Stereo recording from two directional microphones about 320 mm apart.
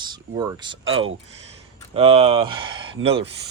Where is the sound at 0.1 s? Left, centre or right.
Centre.